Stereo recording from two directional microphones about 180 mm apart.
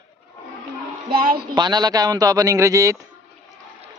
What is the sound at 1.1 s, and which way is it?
Speech, 55° right (ahead or behind).